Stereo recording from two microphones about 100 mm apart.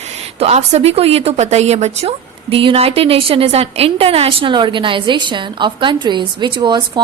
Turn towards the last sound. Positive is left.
turn(degrees=-50)  # may be behind; listen again after turning